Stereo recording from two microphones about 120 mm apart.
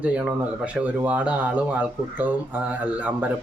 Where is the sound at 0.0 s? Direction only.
10° right (ahead or behind).